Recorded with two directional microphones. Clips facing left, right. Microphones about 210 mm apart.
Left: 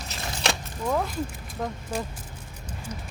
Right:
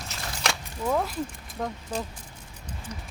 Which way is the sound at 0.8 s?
Centre (ahead or behind).